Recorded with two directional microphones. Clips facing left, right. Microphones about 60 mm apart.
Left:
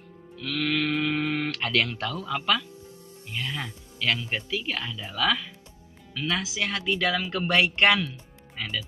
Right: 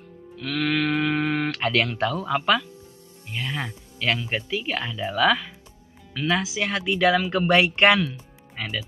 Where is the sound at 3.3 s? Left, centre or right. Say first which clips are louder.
Right 3 dB; right.